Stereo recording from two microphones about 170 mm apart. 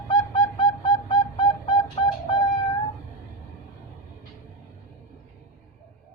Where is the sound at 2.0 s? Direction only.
30° left (ahead or behind).